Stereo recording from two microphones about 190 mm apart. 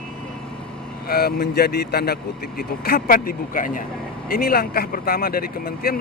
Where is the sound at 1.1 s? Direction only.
55° left (ahead or behind).